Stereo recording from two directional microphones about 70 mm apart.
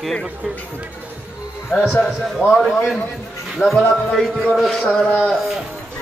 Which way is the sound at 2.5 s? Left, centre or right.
Centre.